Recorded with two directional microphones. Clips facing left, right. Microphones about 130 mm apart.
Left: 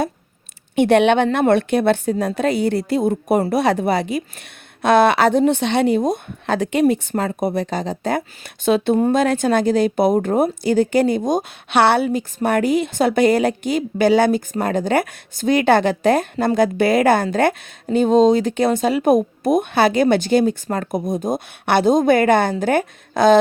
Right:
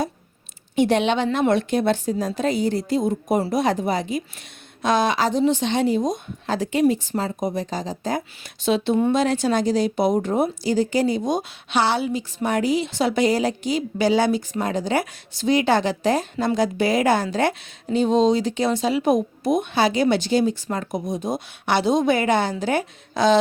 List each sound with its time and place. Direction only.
0.8 s a woman's voice: 60° left (ahead or behind)